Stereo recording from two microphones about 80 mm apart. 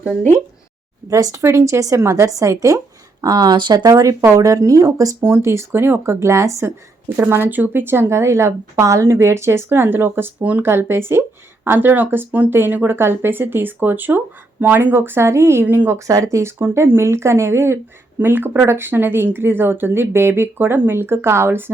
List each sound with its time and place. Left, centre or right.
0.2 s speech: left
1.1 s speech: right
3.8 s speech: right
7.2 s speech: right